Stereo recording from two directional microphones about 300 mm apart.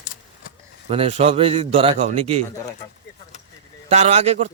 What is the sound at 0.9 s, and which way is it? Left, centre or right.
A man's voice, centre.